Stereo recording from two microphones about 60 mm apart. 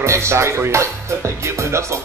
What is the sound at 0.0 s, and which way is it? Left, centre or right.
Speech, right.